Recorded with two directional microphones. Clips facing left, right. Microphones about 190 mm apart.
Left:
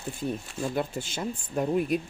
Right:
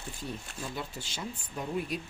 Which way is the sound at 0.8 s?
50° left (ahead or behind).